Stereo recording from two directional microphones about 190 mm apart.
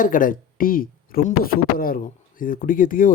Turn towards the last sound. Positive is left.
turn(degrees=45)  # may be behind; listen again after turning